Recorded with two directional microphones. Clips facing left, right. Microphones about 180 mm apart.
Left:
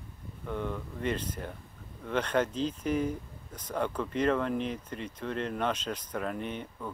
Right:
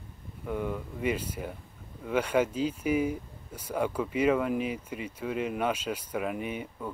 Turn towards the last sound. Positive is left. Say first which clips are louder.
# right 2 dB
turn(degrees=-10)  # may be behind; listen again after turning